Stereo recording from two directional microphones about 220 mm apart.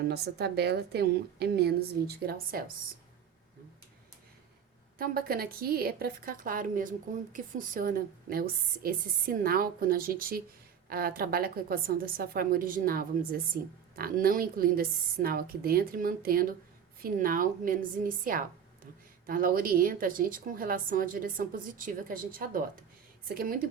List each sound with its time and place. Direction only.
0.1 s a woman's voice: 50° right (ahead or behind)
4.9 s a woman's voice: 45° right (ahead or behind)